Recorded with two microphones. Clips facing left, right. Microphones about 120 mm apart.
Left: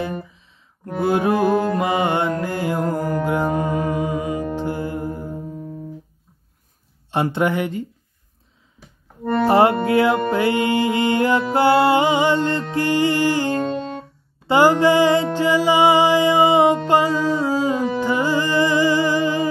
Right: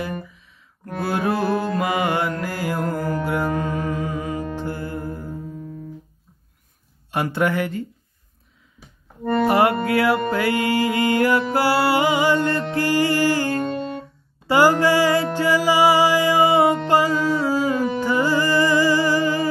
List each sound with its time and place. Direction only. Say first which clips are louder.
0.0 s a sound: left 2 dB; 25° left (ahead or behind)
0.8 s mantra: left 4 dB; 20° left (ahead or behind)
5.5 s music: left 2 dB; 25° left (ahead or behind)
7.1 s music: left 2 dB; 25° left (ahead or behind)
9.2 s music: even; centre (ahead or behind)
9.5 s music: left 4 dB; 25° left (ahead or behind)